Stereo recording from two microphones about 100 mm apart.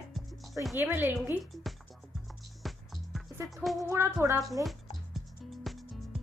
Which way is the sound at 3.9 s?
25° right (ahead or behind).